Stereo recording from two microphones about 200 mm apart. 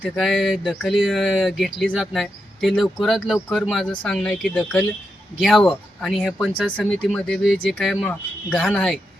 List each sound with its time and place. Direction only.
0.0 s speech: centre (ahead or behind)